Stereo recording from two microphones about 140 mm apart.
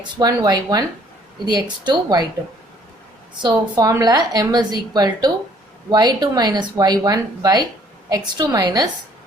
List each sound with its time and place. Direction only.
0.2 s a woman's voice: 30° right (ahead or behind)
3.3 s a woman's voice: 30° right (ahead or behind)